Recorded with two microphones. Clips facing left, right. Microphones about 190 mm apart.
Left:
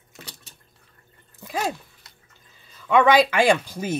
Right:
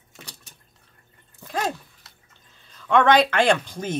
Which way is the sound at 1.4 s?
10° left (ahead or behind).